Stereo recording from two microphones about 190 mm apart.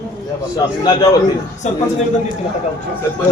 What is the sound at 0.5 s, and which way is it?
Speech, 20° left (ahead or behind).